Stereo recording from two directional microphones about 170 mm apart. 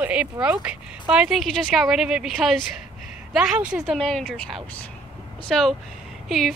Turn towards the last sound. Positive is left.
turn(degrees=0)  # may be behind; listen again after turning